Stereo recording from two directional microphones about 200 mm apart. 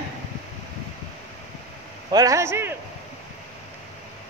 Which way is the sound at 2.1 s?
15° right (ahead or behind).